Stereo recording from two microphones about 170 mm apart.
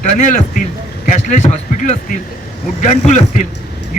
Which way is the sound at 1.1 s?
45° left (ahead or behind).